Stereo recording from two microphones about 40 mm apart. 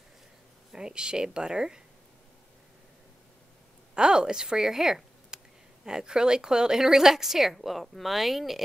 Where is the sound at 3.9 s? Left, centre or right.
Right.